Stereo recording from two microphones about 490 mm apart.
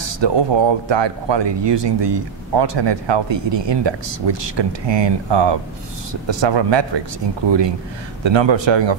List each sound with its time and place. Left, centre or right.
0.2 s speech: right